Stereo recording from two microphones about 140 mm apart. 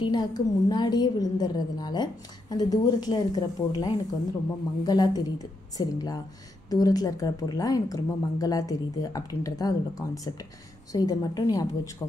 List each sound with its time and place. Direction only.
0.0 s a woman's voice: 30° left (ahead or behind)